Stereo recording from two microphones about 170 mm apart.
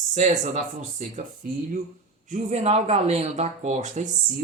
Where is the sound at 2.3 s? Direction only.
40° right (ahead or behind).